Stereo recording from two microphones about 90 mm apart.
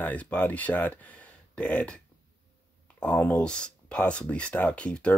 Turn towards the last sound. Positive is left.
turn(degrees=15)  # may be behind; listen again after turning